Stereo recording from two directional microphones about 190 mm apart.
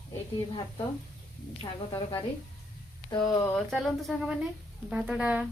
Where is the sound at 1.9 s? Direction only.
20° left (ahead or behind).